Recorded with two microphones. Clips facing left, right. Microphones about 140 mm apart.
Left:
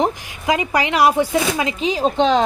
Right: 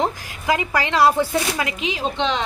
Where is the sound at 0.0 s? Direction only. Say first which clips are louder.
Left 3 dB; 20° left (ahead or behind).